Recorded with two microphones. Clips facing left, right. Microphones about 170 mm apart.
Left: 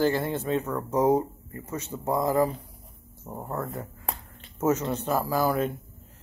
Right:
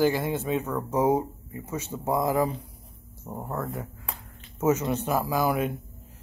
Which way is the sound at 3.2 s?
Centre (ahead or behind).